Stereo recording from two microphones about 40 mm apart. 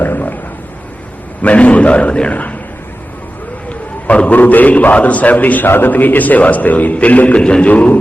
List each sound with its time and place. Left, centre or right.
0.0 s a sound: left
1.4 s a man's voice: left
4.3 s a man's voice: left
5.6 s a man's voice: left
5.9 s a man's voice: left